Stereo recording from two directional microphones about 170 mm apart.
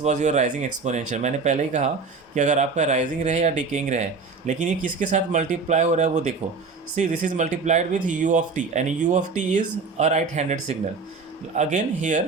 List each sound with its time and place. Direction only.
0.0 s speech: 45° right (ahead or behind)